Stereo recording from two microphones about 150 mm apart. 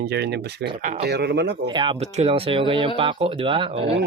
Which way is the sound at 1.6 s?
30° right (ahead or behind).